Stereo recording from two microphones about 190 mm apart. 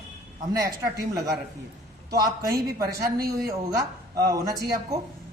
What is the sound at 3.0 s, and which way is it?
A woman's voice, 20° right (ahead or behind).